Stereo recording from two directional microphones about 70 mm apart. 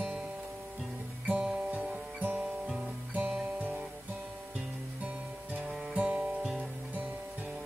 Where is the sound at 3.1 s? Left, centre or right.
Right.